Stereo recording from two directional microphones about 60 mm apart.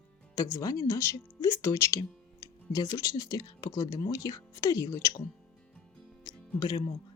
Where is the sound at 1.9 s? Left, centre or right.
Left.